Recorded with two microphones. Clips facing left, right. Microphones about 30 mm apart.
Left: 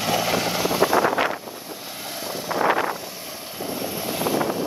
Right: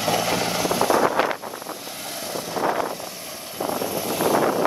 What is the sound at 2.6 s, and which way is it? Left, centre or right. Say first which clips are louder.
Vehicle: left 3 dB; left.